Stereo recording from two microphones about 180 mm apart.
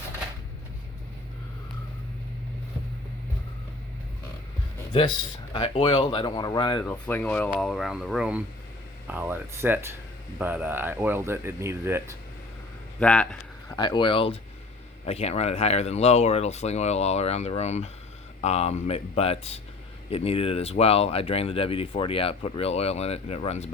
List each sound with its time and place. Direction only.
4.9 s speech: 30° left (ahead or behind)
6.8 s speech: 10° left (ahead or behind); by 12.0 s 15° right (ahead or behind)
13.0 s speech: 5° left (ahead or behind)
13.7 s speech: 25° left (ahead or behind)